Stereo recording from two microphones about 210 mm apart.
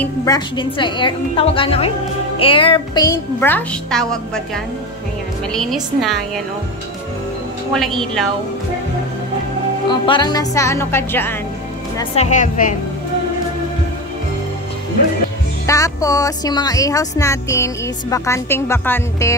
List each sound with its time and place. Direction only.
0.0 s a woman's voice: 15° left (ahead or behind)
5.5 s a woman's voice: centre (ahead or behind)
7.7 s a woman's voice: centre (ahead or behind)
9.8 s a woman's voice: 20° left (ahead or behind)
12.0 s speech: 30° left (ahead or behind)
15.6 s a woman's voice: 15° left (ahead or behind)